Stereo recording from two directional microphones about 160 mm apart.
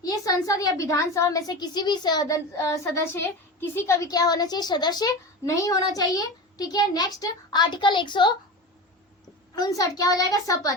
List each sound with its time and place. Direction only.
0.0 s a woman's voice: 25° left (ahead or behind)
9.6 s a woman's voice: 25° left (ahead or behind)